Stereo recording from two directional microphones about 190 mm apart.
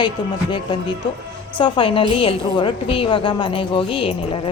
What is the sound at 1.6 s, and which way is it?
A woman's voice, 25° left (ahead or behind).